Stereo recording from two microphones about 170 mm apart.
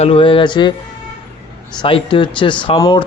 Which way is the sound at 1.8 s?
30° left (ahead or behind).